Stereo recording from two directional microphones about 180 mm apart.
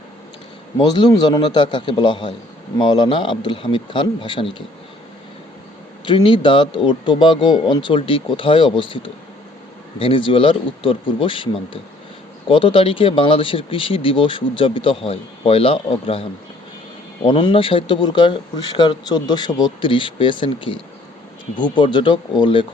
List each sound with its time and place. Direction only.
0.8 s speech: 25° left (ahead or behind)
6.1 s speech: 30° left (ahead or behind)